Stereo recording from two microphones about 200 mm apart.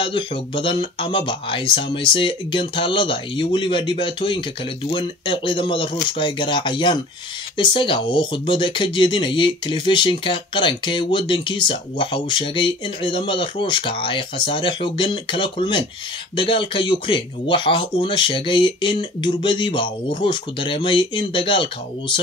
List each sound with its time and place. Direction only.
0.0 s speech: 25° left (ahead or behind)